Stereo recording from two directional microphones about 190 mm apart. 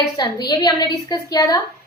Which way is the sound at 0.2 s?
20° left (ahead or behind).